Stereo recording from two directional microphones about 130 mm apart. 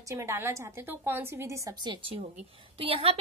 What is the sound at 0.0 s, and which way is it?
A woman's voice, 20° right (ahead or behind).